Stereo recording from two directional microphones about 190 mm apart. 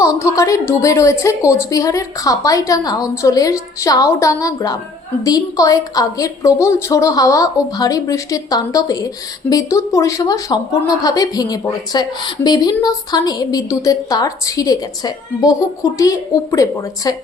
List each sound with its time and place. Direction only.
0.0 s a woman's voice: 15° left (ahead or behind)